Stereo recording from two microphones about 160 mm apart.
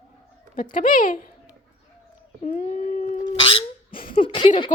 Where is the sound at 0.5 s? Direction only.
60° left (ahead or behind).